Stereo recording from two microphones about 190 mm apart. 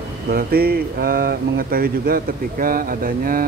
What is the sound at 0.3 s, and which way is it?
Speech, 55° right (ahead or behind).